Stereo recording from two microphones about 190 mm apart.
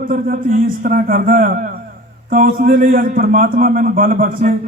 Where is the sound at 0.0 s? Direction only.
45° right (ahead or behind).